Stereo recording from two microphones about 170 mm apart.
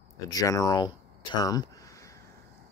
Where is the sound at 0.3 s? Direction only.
20° left (ahead or behind).